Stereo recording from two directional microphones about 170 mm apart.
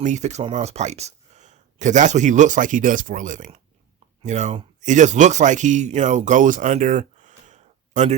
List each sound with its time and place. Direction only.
0.0 s speech: 45° right (ahead or behind)